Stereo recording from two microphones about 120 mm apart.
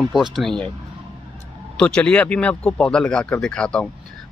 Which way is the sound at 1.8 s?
10° left (ahead or behind).